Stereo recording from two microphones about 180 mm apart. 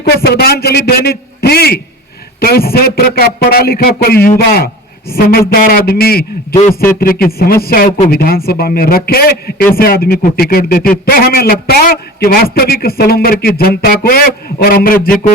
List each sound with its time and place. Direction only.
0.1 s a man's voice: 60° left (ahead or behind)